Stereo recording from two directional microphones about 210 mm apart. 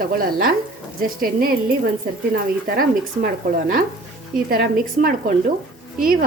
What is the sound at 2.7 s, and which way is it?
A woman's voice, 40° right (ahead or behind).